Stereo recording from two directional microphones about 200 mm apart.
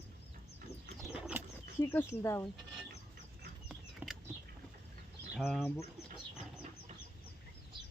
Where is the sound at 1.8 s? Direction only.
10° left (ahead or behind).